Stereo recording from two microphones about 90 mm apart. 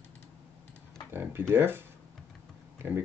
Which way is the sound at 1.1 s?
25° right (ahead or behind).